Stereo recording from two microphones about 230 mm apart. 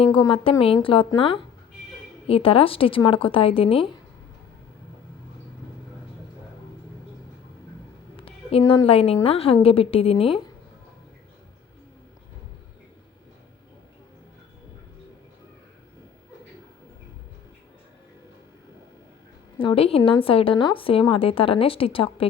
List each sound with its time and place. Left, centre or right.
0.0 s a woman's voice: left
8.1 s a woman's voice: left
19.5 s a woman's voice: left